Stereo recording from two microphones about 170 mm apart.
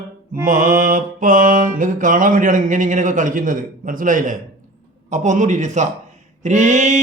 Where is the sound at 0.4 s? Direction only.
50° right (ahead or behind).